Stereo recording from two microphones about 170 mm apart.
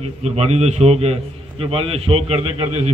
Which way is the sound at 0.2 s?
40° right (ahead or behind).